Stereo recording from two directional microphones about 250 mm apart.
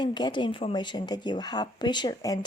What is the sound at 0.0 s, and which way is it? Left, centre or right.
A woman's voice, centre.